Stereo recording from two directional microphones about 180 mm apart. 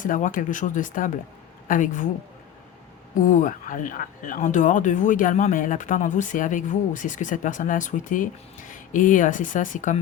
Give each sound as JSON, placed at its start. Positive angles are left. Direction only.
{"t": 0.0, "sound": "speech", "side_deg": 45}
{"t": 3.2, "sound": "speech", "side_deg": 45}